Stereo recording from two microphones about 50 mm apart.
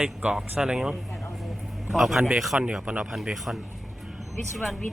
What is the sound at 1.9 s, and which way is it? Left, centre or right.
Speech, centre.